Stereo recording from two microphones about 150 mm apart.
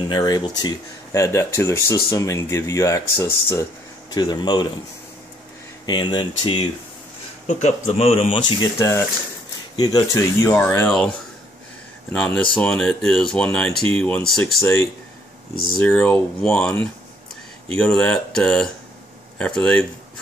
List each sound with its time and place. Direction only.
0.1 s speech: 30° left (ahead or behind)
4.1 s speech: 30° left (ahead or behind)
5.9 s speech: 30° left (ahead or behind)
7.4 s speech: 45° left (ahead or behind)
8.7 s speech: 20° left (ahead or behind)
12.1 s speech: 5° left (ahead or behind)
14.6 s speech: 15° left (ahead or behind)
15.5 s speech: 80° left
15.8 s speech: 10° left (ahead or behind)